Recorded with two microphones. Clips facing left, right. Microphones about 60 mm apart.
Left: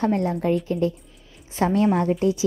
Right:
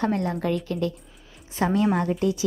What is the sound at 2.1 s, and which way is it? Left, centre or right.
Speech, left.